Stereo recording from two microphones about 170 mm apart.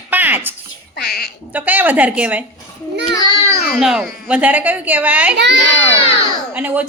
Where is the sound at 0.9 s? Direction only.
65° left (ahead or behind).